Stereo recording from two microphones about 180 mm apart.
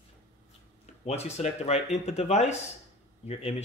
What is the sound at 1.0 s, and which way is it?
Speech, 35° left (ahead or behind).